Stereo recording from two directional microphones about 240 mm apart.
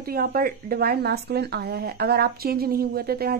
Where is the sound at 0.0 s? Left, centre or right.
Right.